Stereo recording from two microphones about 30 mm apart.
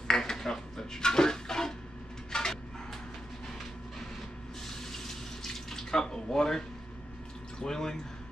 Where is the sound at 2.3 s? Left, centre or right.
Left.